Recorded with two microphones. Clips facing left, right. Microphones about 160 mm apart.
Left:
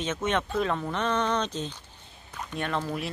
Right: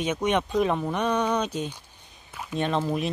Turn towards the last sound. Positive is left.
turn(degrees=-20)  # may be behind; listen again after turning